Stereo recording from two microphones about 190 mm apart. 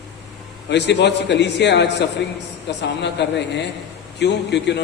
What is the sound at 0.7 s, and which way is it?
A man's voice, 65° left (ahead or behind).